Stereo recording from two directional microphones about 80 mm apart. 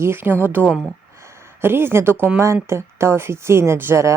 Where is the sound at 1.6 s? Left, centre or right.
Right.